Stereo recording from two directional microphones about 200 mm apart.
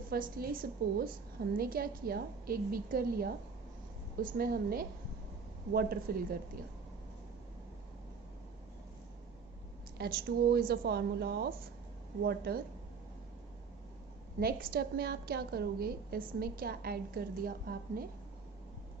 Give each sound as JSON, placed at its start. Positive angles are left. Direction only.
{"t": 0.1, "sound": "a woman's voice", "side_deg": -50}
{"t": 10.0, "sound": "a woman's voice", "side_deg": -50}
{"t": 14.3, "sound": "a woman's voice", "side_deg": -50}